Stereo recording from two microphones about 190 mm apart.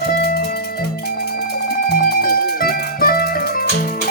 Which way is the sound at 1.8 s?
55° left (ahead or behind).